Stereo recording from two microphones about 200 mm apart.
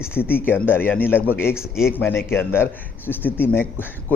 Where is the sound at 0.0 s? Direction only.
10° left (ahead or behind).